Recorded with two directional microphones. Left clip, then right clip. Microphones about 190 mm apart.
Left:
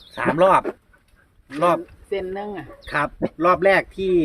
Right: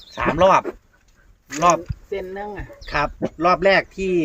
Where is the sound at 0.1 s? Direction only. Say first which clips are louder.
Right 1 dB; centre (ahead or behind).